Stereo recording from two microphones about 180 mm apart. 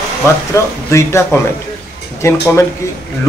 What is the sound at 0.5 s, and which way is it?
A man's voice, 15° left (ahead or behind).